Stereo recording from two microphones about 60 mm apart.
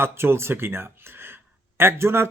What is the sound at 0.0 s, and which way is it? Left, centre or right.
A man's voice, right.